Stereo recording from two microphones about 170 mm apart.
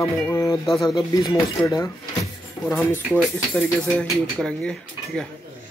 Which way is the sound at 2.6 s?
20° left (ahead or behind).